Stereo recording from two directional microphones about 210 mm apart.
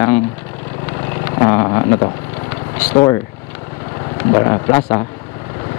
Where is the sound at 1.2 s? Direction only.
20° left (ahead or behind).